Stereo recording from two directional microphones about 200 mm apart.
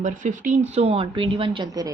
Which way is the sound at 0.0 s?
40° right (ahead or behind).